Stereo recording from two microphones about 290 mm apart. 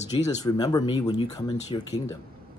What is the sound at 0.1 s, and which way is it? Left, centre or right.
Speech, centre.